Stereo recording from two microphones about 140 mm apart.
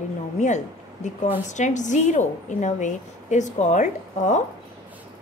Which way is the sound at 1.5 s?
60° left (ahead or behind).